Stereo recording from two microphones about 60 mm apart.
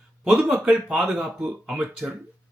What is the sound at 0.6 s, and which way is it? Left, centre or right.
Speech, right.